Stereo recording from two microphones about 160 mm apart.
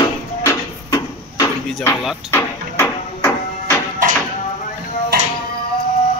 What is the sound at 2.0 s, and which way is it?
Speech, centre (ahead or behind).